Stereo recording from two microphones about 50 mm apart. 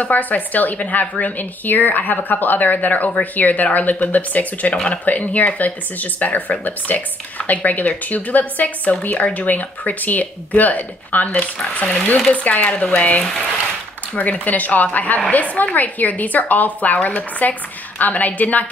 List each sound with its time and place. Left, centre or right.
0.0 s speech: left